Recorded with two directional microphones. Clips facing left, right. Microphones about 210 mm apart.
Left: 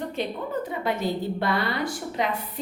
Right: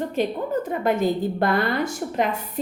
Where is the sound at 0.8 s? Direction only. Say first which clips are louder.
Right 6 dB; 50° right (ahead or behind).